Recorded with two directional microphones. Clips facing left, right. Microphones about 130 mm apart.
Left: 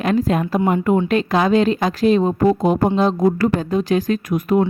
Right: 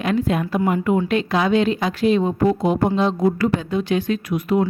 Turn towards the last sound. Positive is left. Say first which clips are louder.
# left 2 dB
turn(degrees=45)  # may be behind; listen again after turning